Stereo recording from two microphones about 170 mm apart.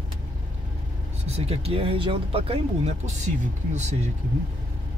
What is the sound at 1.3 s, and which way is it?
Speech, 35° right (ahead or behind).